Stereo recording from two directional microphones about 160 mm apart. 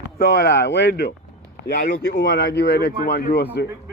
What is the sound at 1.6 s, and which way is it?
Speech, 75° left (ahead or behind).